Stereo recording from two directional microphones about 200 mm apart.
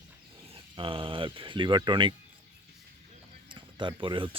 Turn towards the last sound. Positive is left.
turn(degrees=-25)  # may be behind; listen again after turning